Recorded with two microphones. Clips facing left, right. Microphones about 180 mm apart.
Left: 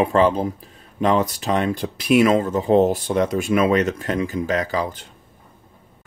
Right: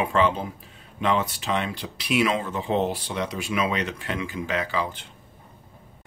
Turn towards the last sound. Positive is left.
turn(degrees=40)  # may be behind; listen again after turning